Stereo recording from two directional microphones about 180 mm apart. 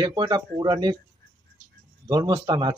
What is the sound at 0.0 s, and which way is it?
Speech, 25° right (ahead or behind).